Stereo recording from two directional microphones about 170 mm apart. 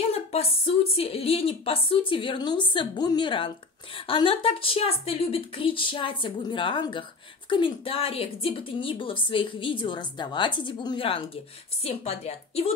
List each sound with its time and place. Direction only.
0.1 s speech: 35° left (ahead or behind)